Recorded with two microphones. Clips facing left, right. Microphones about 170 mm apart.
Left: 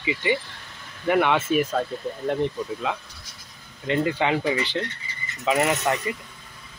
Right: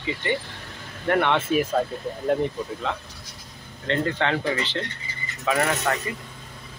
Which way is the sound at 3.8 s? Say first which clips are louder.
Left 1 dB; 10° left (ahead or behind).